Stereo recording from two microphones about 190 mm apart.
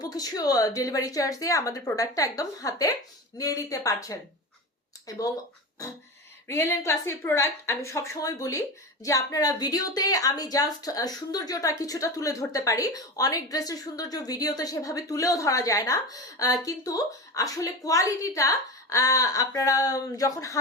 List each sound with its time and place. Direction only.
0.0 s a woman's voice: 20° left (ahead or behind)
6.5 s a woman's voice: 15° left (ahead or behind)